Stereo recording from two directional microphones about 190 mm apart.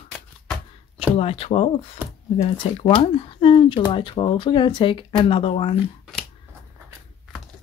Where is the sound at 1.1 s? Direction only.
30° left (ahead or behind).